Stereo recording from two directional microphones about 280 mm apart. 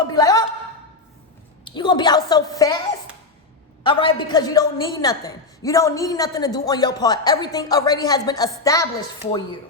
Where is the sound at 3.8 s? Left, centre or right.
Centre.